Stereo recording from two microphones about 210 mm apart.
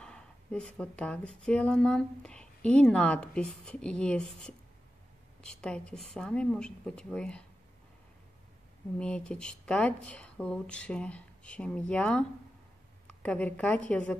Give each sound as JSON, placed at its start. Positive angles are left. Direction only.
{"t": 0.0, "sound": "speech", "side_deg": 5}
{"t": 8.9, "sound": "a woman's voice", "side_deg": 5}